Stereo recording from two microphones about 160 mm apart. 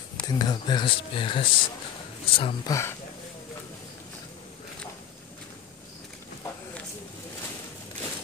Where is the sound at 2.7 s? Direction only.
15° left (ahead or behind).